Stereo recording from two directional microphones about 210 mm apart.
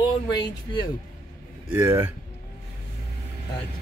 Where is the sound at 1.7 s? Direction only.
10° right (ahead or behind).